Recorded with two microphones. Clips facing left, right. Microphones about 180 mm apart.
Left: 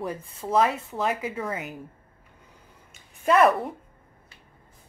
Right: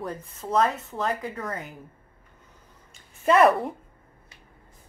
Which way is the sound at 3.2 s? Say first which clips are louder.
Right 1 dB; centre (ahead or behind).